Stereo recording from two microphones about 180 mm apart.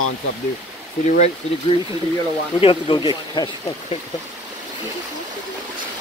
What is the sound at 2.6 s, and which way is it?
Speech, 25° left (ahead or behind).